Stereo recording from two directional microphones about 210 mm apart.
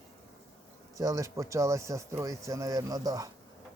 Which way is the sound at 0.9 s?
15° right (ahead or behind).